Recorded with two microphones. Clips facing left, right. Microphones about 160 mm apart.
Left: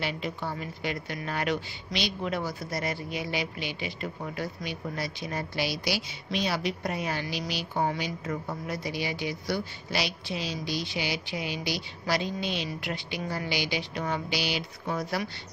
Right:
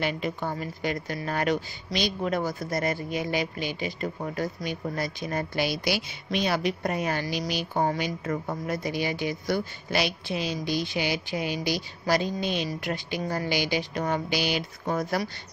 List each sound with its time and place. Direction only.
0.0 s a woman's voice: 50° right (ahead or behind)